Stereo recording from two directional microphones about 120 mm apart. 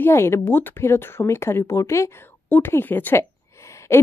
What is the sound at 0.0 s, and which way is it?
A woman's voice, 20° left (ahead or behind).